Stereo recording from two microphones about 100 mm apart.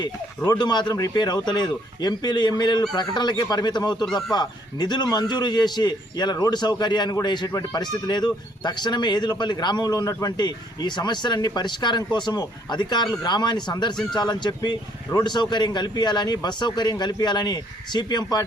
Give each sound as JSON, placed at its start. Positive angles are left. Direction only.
{"t": 0.6, "sound": "a man's voice", "side_deg": 45}